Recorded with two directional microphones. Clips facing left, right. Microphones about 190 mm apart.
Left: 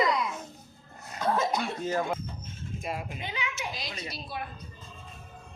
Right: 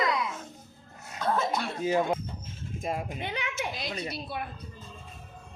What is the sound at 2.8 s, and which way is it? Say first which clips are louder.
A woman's voice: right 4 dB; 50° right (ahead or behind).